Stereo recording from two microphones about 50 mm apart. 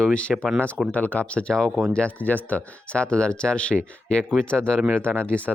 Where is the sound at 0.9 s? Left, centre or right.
Left.